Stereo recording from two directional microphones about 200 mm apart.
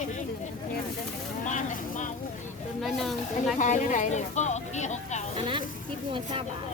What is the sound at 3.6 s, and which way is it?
Speech, 40° left (ahead or behind).